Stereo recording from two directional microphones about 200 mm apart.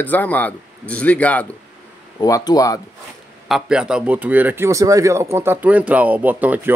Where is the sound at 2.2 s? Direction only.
20° left (ahead or behind).